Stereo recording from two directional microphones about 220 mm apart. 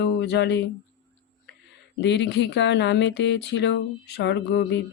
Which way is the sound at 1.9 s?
50° left (ahead or behind).